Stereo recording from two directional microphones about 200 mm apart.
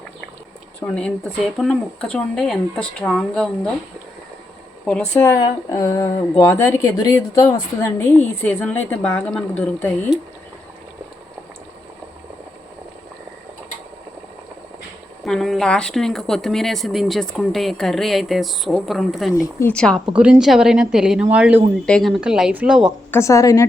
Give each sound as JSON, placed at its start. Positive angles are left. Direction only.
{"t": 0.8, "sound": "speech", "side_deg": 5}
{"t": 4.9, "sound": "speech", "side_deg": 5}
{"t": 15.2, "sound": "speech", "side_deg": 0}
{"t": 20.1, "sound": "speech", "side_deg": -5}
{"t": 23.1, "sound": "speech", "side_deg": 15}